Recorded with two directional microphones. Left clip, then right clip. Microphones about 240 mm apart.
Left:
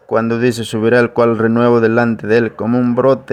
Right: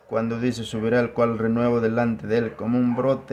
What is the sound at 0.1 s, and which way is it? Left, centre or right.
Speech, left.